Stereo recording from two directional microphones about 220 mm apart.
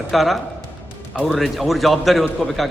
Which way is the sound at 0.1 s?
Centre (ahead or behind).